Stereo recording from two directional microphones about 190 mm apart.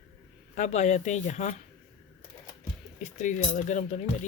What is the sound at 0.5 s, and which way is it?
Speech, 35° left (ahead or behind).